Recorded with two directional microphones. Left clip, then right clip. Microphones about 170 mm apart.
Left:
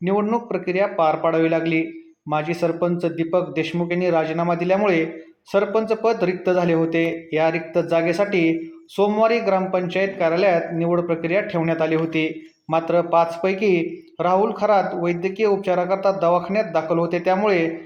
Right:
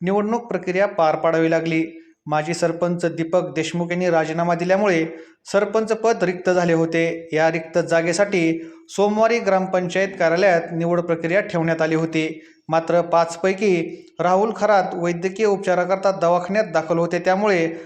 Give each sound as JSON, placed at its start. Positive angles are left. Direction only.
{"t": 0.0, "sound": "a man's voice", "side_deg": -25}